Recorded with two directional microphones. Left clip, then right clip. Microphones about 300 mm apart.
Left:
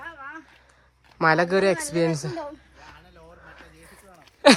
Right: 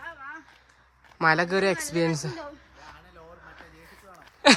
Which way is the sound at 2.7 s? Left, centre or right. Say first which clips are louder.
Even; centre.